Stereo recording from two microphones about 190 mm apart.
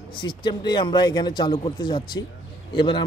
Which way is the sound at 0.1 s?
25° left (ahead or behind).